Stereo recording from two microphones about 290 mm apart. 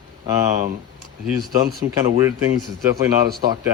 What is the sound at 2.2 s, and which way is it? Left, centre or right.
Speech, centre.